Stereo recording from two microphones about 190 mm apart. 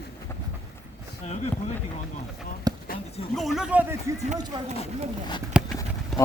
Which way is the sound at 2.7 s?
20° right (ahead or behind).